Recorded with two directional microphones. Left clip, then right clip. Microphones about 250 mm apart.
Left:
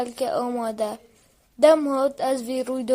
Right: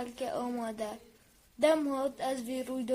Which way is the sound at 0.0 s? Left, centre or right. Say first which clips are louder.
Left 11 dB; left.